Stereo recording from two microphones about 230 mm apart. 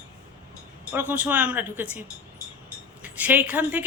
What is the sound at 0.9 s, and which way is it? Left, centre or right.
A woman's voice, centre.